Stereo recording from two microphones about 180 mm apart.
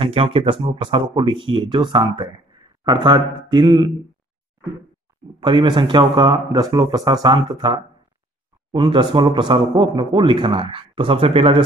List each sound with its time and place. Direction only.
0.0 s speech: 30° right (ahead or behind)
5.4 s speech: 25° right (ahead or behind)